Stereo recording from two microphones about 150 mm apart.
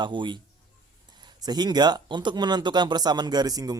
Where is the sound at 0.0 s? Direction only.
30° right (ahead or behind).